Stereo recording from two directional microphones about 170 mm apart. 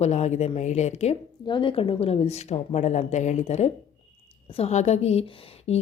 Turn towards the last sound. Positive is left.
turn(degrees=35)  # may be behind; listen again after turning